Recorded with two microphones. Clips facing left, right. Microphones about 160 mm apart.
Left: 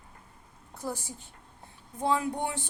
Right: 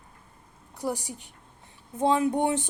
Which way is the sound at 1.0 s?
15° right (ahead or behind).